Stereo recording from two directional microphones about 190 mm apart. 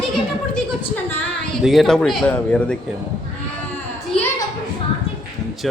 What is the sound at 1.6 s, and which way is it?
Speech, centre (ahead or behind).